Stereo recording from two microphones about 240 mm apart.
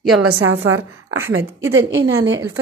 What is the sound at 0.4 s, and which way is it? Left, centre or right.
Speech, right.